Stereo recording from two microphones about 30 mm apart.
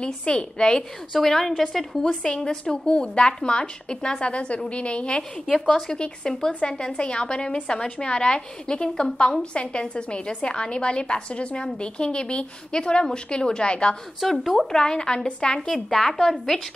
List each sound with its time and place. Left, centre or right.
0.0 s a woman's voice: left
1.2 s a woman's voice: centre
2.2 s a woman's voice: left
6.2 s a woman's voice: left
9.3 s a woman's voice: left
14.2 s a woman's voice: centre
14.7 s a woman's voice: left
15.5 s a woman's voice: left